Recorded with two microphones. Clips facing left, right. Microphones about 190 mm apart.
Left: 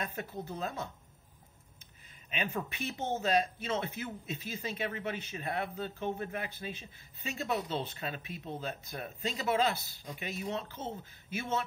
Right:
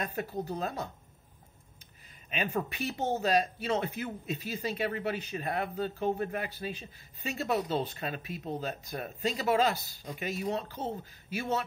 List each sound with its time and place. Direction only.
0.0 s speech: 40° right (ahead or behind)
2.3 s speech: 40° right (ahead or behind)